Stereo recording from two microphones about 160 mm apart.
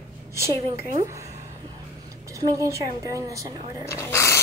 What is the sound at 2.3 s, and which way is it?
A woman's voice, 20° right (ahead or behind).